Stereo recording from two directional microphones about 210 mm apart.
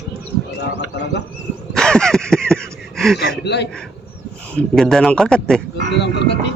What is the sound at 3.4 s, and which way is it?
Speech, 55° left (ahead or behind).